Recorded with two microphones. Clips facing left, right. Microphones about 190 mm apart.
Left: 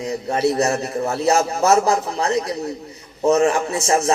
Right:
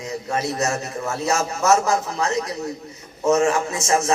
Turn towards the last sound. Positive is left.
turn(degrees=30)  # may be behind; listen again after turning